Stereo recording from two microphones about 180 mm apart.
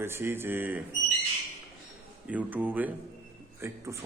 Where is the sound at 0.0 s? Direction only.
15° right (ahead or behind).